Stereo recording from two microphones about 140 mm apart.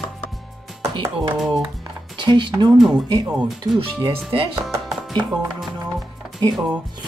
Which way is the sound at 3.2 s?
10° right (ahead or behind).